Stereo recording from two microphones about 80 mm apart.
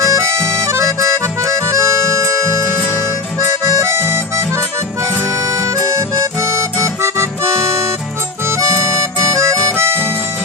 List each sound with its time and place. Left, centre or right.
0.0 s accordion: right
3.6 s harmonica: right
5.5 s accordion: right
8.4 s music: right